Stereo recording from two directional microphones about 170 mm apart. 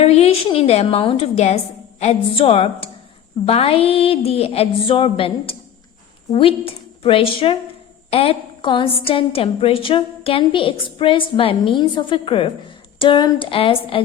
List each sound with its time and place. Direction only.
0.0 s a woman's voice: 40° left (ahead or behind)